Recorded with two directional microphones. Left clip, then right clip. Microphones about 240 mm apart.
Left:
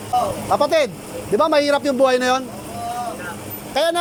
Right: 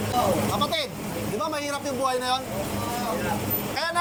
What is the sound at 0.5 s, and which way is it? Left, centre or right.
A man's voice, left.